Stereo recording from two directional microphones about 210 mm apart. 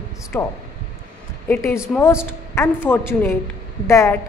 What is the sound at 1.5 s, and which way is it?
A woman's voice, 10° left (ahead or behind).